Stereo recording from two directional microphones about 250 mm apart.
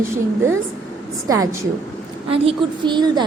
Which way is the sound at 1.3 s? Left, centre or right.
Centre.